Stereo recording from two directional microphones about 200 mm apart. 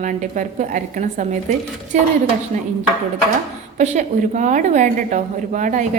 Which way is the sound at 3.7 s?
35° right (ahead or behind).